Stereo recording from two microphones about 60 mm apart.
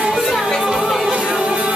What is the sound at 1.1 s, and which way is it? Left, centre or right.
Music, centre.